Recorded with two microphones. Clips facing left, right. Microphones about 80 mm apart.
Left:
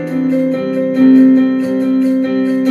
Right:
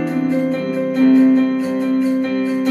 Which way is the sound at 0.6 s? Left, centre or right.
Left.